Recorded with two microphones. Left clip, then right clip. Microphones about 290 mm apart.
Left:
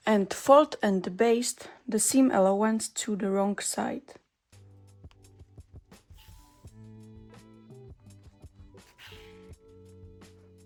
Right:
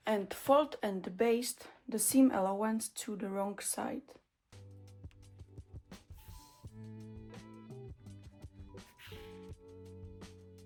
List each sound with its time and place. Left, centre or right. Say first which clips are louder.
0.0 s speech: left 8 dB; left
5.9 s music: even; centre
9.0 s music: left 3 dB; centre
9.6 s music: even; centre